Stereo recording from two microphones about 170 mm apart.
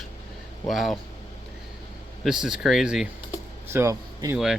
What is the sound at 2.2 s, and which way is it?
Speech, 5° right (ahead or behind).